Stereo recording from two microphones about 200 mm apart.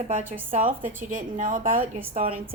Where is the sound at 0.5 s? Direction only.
45° right (ahead or behind).